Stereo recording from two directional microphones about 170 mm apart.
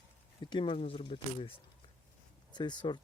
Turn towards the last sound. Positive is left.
turn(degrees=25)  # may be behind; listen again after turning